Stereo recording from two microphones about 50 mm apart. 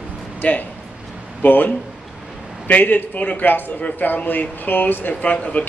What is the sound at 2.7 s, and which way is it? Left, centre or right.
A man's voice, left.